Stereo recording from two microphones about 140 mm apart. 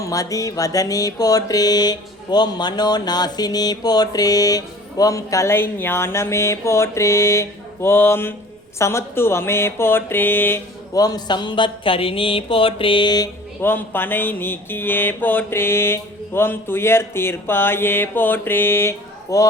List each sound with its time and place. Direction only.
0.0 s music: 25° left (ahead or behind)
8.8 s mantra: 20° left (ahead or behind)
11.0 s a sound: 30° left (ahead or behind)
13.6 s mantra: 15° left (ahead or behind)